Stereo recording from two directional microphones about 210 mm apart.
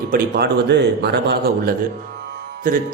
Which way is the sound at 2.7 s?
40° right (ahead or behind).